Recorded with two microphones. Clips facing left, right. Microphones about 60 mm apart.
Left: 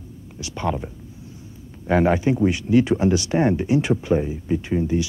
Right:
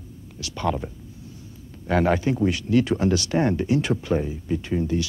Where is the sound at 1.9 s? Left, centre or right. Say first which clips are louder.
Left 3 dB; centre.